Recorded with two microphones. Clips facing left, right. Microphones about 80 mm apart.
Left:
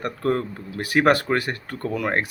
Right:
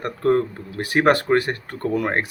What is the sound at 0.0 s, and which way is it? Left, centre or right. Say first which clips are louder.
Speech: right 4 dB; right.